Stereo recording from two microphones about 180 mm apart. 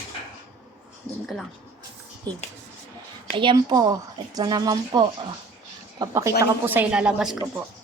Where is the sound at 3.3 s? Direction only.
25° right (ahead or behind); by 7.3 s 5° right (ahead or behind).